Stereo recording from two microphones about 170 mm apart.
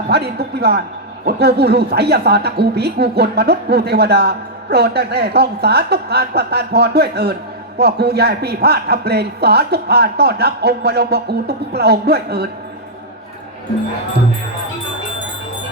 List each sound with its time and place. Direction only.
0.1 s speech: 70° right (ahead or behind)